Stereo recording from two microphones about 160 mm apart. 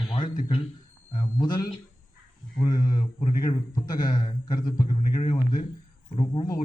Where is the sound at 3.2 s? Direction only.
45° left (ahead or behind).